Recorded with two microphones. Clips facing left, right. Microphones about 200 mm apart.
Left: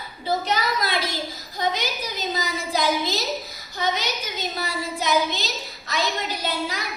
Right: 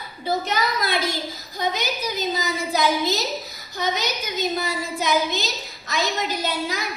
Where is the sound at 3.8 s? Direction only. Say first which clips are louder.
Right 1 dB; 45° right (ahead or behind).